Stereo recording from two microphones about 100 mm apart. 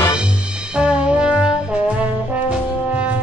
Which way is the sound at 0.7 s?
10° right (ahead or behind).